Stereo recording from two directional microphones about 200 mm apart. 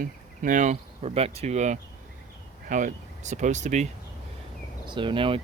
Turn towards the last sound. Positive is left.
turn(degrees=-25)  # may be behind; listen again after turning